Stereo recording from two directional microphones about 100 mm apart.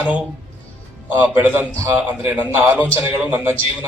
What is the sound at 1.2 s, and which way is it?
A man's voice, 25° right (ahead or behind).